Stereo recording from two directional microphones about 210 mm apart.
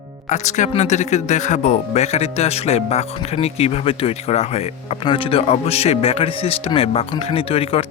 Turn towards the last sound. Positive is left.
turn(degrees=25)  # may be behind; listen again after turning